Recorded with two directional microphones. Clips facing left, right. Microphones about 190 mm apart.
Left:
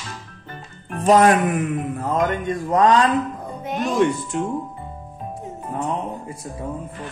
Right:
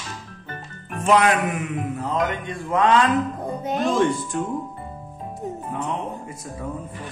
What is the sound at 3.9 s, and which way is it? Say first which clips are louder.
Speech: left 1 dB; 20° left (ahead or behind).